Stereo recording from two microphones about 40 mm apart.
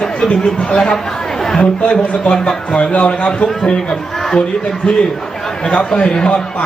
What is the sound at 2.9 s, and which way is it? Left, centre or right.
Speech, left.